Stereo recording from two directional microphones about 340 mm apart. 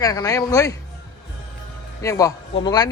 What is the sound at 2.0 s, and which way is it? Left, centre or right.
Speech, centre.